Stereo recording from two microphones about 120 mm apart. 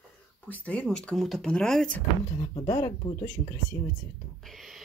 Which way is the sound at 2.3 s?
40° left (ahead or behind).